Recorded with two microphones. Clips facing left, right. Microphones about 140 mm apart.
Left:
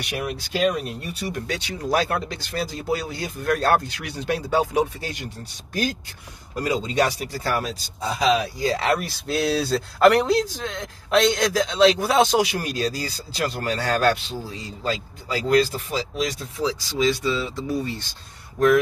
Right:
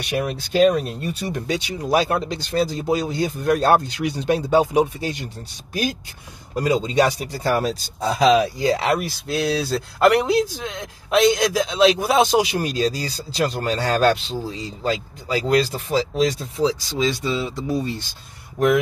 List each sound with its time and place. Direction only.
0.1 s speech: 30° right (ahead or behind)
1.5 s speech: 15° right (ahead or behind)
6.6 s speech: 20° right (ahead or behind)
7.6 s speech: 40° right (ahead or behind)
8.5 s speech: 20° right (ahead or behind)
9.3 s speech: centre (ahead or behind); by 17.8 s 20° right (ahead or behind)